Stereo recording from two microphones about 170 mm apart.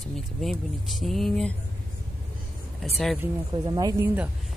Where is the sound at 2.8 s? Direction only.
Centre (ahead or behind).